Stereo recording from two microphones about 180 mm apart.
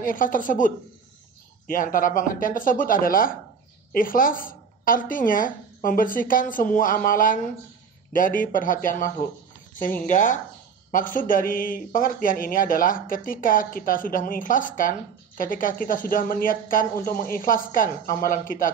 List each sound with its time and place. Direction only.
0.0 s a man's voice: 50° left (ahead or behind)